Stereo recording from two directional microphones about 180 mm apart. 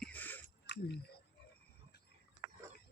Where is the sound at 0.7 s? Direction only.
75° left (ahead or behind).